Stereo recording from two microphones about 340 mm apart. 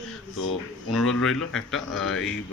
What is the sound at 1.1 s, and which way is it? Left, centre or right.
Speech, centre.